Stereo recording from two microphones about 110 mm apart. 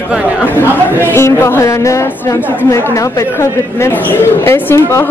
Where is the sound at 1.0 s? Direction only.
25° left (ahead or behind).